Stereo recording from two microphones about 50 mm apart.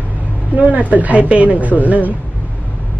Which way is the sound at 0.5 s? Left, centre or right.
Right.